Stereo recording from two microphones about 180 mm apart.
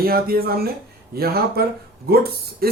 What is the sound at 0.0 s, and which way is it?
Speech, 55° right (ahead or behind).